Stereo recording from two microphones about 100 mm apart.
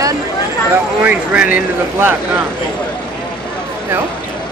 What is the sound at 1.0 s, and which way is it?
Speech, 15° right (ahead or behind).